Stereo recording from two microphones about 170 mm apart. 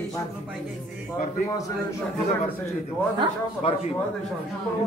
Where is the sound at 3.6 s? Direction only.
30° left (ahead or behind).